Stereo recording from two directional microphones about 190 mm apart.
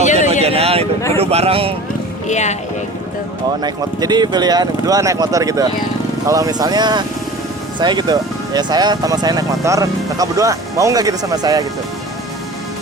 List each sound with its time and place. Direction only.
0.0 s vehicle: 40° left (ahead or behind)
0.4 s a sound: 30° right (ahead or behind)
1.1 s speech: 30° right (ahead or behind)
2.2 s speech: 40° left (ahead or behind)
3.6 s speech: 20° right (ahead or behind)